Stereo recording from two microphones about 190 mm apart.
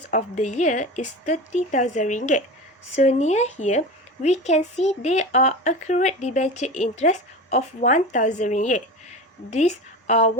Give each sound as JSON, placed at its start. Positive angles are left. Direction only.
{"t": 0.1, "sound": "speech", "side_deg": 40}